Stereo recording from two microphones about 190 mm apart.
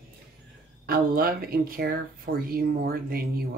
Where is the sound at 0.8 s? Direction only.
50° right (ahead or behind).